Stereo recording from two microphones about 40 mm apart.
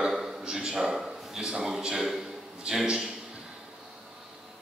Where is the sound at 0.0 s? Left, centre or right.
Centre.